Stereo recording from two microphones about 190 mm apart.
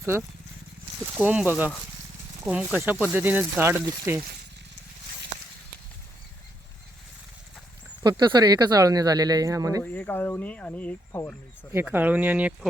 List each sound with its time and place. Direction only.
1.1 s speech: 5° right (ahead or behind)
8.0 s speech: 25° right (ahead or behind)
9.8 s speech: 10° left (ahead or behind)
11.7 s speech: 10° right (ahead or behind)